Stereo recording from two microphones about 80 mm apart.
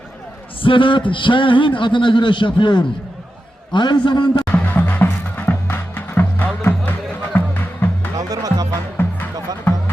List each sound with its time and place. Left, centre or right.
0.6 s a man's voice: left
3.7 s a man's voice: left
4.4 s music: left
8.1 s music: right
9.0 s music: left